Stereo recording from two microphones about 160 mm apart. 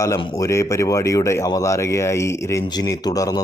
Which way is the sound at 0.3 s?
20° left (ahead or behind).